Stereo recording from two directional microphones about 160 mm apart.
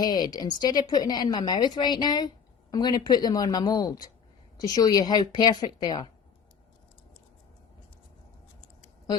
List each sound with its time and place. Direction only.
0.0 s a woman's voice: 25° left (ahead or behind)